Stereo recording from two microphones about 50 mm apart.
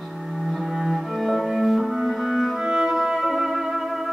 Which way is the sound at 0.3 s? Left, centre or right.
Centre.